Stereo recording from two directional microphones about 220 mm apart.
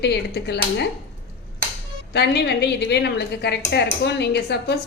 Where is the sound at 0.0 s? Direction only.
50° left (ahead or behind).